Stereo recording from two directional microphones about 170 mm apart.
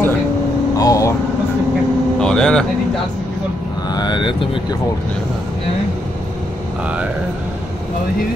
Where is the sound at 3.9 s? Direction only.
25° left (ahead or behind).